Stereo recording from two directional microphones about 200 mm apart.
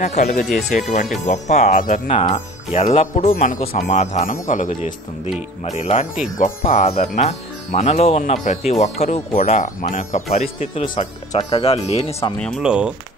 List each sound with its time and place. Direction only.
0.0 s speech: 35° left (ahead or behind)
12.4 s speech: centre (ahead or behind)